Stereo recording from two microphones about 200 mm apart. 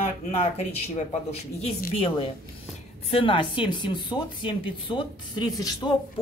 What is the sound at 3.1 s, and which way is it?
Speech, 25° left (ahead or behind).